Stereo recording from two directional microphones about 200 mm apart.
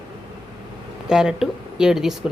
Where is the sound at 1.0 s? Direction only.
5° right (ahead or behind).